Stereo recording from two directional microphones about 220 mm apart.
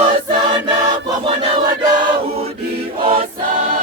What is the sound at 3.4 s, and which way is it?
Choir, 40° right (ahead or behind).